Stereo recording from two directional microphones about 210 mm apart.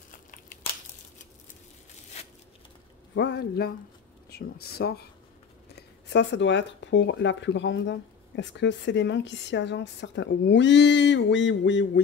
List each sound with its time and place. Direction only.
0.1 s crumpling: 40° left (ahead or behind)
3.2 s speech: 50° left (ahead or behind)